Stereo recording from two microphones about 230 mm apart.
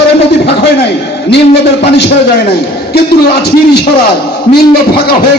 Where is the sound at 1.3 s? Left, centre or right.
Left.